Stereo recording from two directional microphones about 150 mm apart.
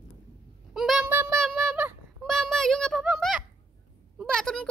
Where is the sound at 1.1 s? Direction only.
15° right (ahead or behind).